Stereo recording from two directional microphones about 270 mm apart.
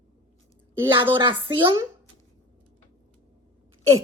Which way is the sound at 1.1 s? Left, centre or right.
Centre.